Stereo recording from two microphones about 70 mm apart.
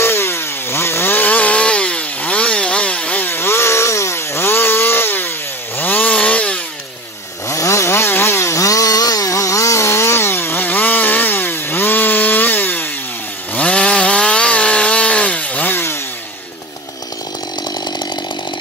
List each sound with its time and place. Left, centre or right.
0.0 s chainsaw: left; by 6.6 s centre
7.4 s chainsaw: left
7.9 s chainsaw: left
13.6 s chainsaw: centre
15.7 s chainsaw: left